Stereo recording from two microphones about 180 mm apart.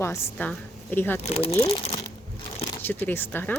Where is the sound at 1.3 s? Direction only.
35° left (ahead or behind).